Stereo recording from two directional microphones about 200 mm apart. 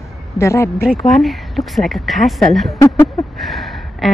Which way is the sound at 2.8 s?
15° left (ahead or behind).